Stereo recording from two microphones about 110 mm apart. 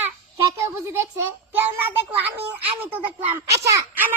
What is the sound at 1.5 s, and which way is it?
Speech, 20° right (ahead or behind).